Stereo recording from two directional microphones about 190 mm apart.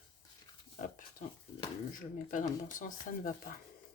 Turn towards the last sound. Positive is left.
turn(degrees=45)  # may be behind; listen again after turning